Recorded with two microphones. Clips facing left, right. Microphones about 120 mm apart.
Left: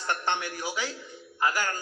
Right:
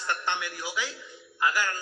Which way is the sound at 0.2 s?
40° left (ahead or behind).